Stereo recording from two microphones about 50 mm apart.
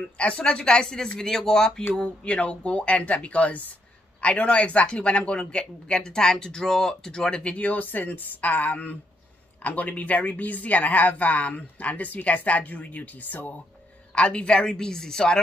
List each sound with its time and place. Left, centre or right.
0.2 s speech: left
2.0 s speech: left
14.1 s speech: left